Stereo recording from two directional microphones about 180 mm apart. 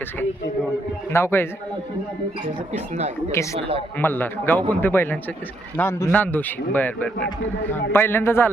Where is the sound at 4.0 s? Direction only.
10° left (ahead or behind).